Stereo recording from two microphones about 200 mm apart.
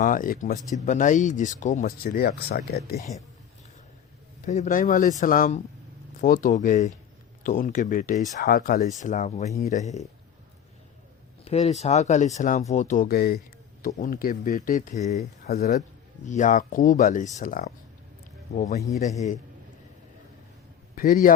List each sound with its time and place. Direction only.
0.0 s speech: 40° left (ahead or behind)
2.0 s speech: 50° left (ahead or behind)
4.4 s speech: 35° left (ahead or behind)
8.4 s speech: 50° left (ahead or behind); by 10.1 s 35° left (ahead or behind)
11.4 s speech: 35° left (ahead or behind)
15.5 s speech: 50° left (ahead or behind)
16.2 s speech: 40° left (ahead or behind)
20.9 s a man's voice: 45° left (ahead or behind)